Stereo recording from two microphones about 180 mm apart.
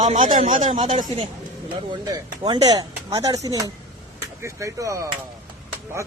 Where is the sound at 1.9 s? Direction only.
25° right (ahead or behind).